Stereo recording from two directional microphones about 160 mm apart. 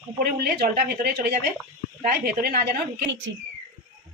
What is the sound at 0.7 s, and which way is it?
A woman's voice, 75° right (ahead or behind).